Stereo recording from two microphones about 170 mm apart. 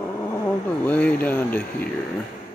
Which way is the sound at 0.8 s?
10° left (ahead or behind).